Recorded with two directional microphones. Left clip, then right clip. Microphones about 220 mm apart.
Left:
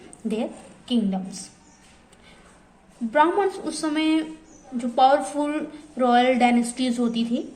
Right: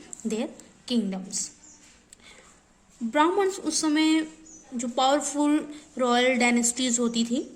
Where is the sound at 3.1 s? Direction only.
35° right (ahead or behind).